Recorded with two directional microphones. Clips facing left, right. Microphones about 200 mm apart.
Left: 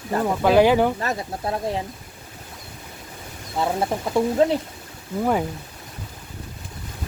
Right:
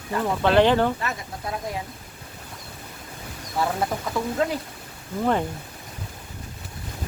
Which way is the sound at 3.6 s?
25° left (ahead or behind).